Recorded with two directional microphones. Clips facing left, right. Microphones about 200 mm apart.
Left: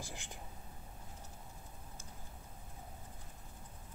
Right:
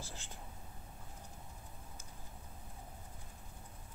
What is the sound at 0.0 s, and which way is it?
Speech, 15° left (ahead or behind).